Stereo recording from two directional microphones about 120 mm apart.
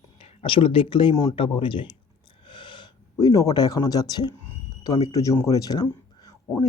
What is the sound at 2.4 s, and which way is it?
Gasp, 45° left (ahead or behind).